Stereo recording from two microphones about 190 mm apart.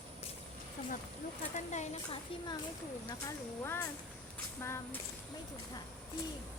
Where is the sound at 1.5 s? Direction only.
40° left (ahead or behind).